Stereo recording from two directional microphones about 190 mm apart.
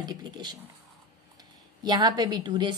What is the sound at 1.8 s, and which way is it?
Speech, 20° right (ahead or behind).